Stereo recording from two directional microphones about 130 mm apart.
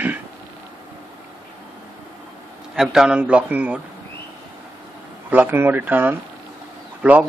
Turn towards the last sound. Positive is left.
turn(degrees=-10)  # may be behind; listen again after turning